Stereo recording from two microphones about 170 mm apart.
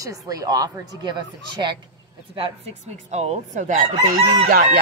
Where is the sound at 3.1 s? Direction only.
40° right (ahead or behind); by 4.7 s 55° right (ahead or behind).